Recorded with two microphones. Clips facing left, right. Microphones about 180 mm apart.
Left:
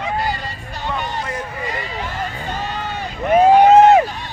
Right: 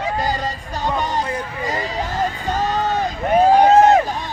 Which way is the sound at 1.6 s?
40° right (ahead or behind).